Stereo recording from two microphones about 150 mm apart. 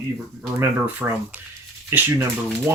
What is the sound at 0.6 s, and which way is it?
Speech, 15° right (ahead or behind).